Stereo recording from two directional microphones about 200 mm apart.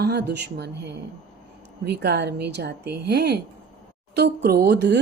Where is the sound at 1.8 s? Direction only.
55° right (ahead or behind).